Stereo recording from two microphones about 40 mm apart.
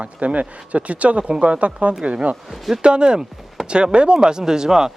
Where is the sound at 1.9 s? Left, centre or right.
Right.